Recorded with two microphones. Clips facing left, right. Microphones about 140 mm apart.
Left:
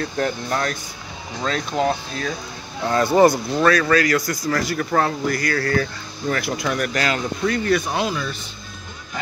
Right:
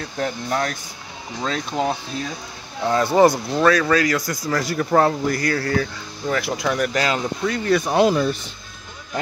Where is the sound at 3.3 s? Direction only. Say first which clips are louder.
Even; centre (ahead or behind).